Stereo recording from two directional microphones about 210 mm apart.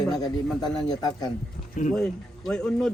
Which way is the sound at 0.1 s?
20° left (ahead or behind).